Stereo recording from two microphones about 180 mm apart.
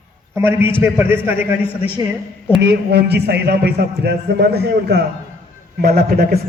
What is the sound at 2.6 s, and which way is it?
A man's voice, 65° right (ahead or behind).